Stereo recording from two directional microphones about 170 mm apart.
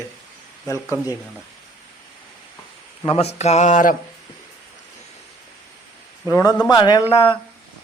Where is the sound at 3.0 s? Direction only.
35° left (ahead or behind).